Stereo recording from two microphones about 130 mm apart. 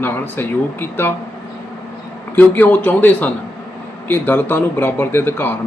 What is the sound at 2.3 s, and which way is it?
Speech, 15° left (ahead or behind).